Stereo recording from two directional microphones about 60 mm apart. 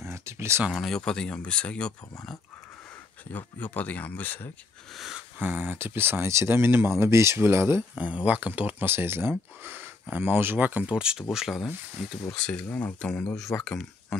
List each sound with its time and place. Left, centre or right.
0.0 s a sound: right
0.7 s speech: centre
3.3 s speech: left
5.4 s speech: right
7.9 s speech: right
11.0 s speech: centre
12.3 s speech: centre